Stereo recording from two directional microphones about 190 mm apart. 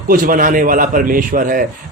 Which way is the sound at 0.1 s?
45° right (ahead or behind).